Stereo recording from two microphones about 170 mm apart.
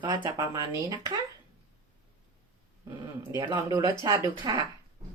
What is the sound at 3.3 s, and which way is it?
Speech, 25° right (ahead or behind).